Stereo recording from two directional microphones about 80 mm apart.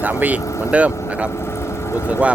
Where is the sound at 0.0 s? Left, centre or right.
Right.